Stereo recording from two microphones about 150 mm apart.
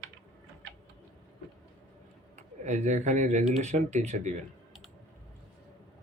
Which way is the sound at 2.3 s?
50° right (ahead or behind).